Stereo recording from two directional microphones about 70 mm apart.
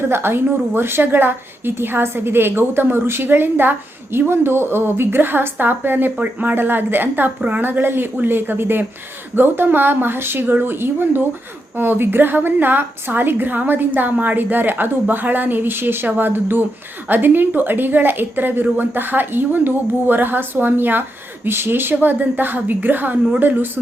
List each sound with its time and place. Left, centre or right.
0.1 s a woman's voice: right